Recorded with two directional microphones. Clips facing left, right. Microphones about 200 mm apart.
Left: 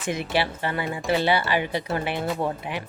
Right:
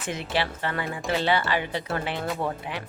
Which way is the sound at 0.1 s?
10° left (ahead or behind).